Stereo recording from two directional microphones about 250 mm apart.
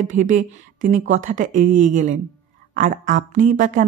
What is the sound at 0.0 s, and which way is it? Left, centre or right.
Speech, right.